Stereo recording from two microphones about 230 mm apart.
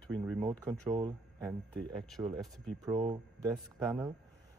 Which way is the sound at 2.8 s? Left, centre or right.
Right.